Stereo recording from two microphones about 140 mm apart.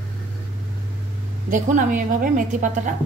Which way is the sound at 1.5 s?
65° right (ahead or behind).